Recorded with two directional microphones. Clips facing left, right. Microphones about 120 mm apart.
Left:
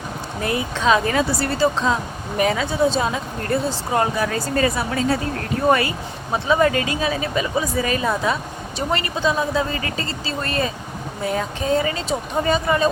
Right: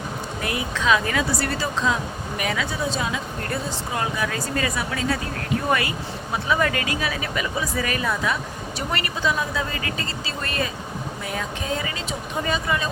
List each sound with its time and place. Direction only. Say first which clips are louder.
0.4 s speech: left 4 dB; 30° left (ahead or behind)
6.3 s speech: left 5 dB; 25° left (ahead or behind)